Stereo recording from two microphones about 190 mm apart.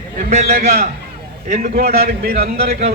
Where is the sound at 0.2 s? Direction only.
45° right (ahead or behind).